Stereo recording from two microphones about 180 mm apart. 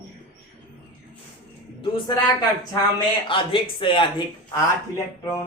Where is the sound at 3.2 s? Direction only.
30° left (ahead or behind).